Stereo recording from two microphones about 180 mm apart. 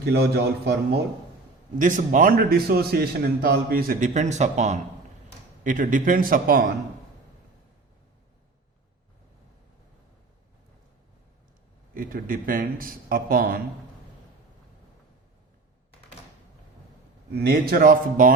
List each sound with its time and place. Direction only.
0.0 s a man's voice: 65° right (ahead or behind)
1.8 s a man's voice: 45° right (ahead or behind)
11.9 s a man's voice: 50° right (ahead or behind)
17.3 s a man's voice: 60° right (ahead or behind)